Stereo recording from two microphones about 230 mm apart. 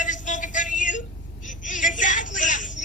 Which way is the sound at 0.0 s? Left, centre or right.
Left.